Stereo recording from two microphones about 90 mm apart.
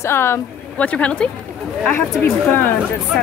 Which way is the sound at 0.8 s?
15° left (ahead or behind).